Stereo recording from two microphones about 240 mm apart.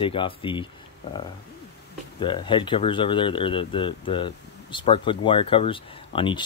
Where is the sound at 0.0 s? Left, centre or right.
Left.